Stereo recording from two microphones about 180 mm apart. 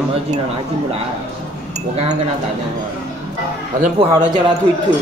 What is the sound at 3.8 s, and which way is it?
Speech, 30° right (ahead or behind).